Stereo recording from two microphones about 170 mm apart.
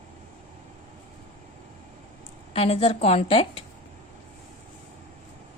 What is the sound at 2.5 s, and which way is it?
Speech, 35° left (ahead or behind).